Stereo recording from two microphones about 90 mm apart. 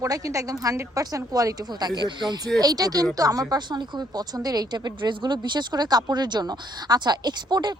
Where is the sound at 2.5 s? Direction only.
45° right (ahead or behind).